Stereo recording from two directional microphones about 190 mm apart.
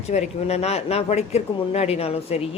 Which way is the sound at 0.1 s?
35° left (ahead or behind).